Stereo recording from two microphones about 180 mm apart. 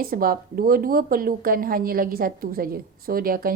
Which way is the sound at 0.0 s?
55° right (ahead or behind).